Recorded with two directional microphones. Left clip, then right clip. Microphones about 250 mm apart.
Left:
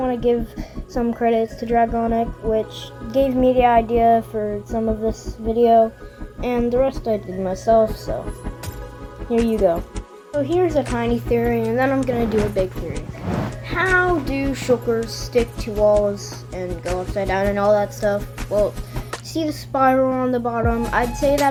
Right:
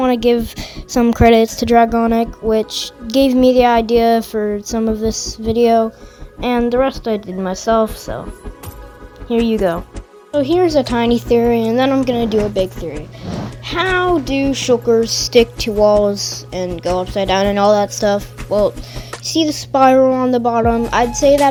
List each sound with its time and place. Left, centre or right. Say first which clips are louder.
0.0 s speech: right 6 dB; right
0.5 s speech: right 6 dB; right
0.9 s speech: right 8 dB; right
3.1 s speech: right 5 dB; right
6.4 s a woman's voice: right 4 dB; right
9.3 s a woman's voice: right 2 dB; right
10.5 s speech: right 5 dB; right
13.7 s a woman's voice: right 3 dB; right